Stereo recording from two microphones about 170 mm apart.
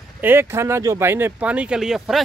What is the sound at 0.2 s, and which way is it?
Speech, 15° right (ahead or behind).